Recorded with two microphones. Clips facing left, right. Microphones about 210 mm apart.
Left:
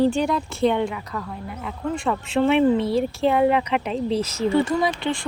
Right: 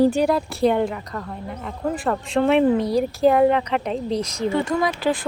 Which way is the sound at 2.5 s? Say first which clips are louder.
Right 1 dB; 40° right (ahead or behind).